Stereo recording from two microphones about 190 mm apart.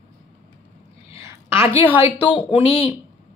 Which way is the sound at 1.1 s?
15° right (ahead or behind).